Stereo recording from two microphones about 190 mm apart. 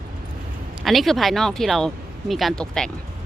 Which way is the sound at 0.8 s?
Centre (ahead or behind).